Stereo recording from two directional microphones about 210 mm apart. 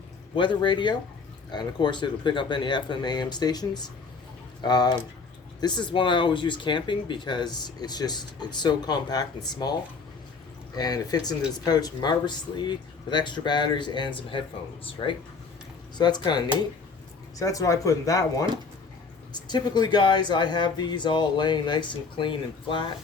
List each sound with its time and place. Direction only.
0.3 s speech: 25° left (ahead or behind)
10.8 s speech: 20° left (ahead or behind)
16.0 s speech: 20° left (ahead or behind)
17.4 s speech: 15° left (ahead or behind)